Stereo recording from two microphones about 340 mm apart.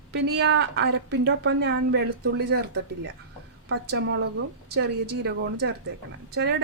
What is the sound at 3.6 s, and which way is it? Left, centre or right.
A woman's voice, right.